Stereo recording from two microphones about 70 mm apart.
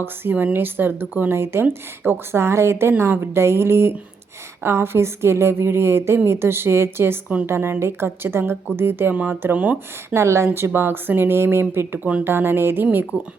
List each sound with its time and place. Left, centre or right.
0.0 s speech: right
9.1 s speech: centre
10.2 s speech: right